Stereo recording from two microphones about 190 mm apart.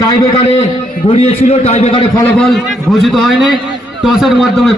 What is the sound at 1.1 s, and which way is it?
Speech, 30° left (ahead or behind).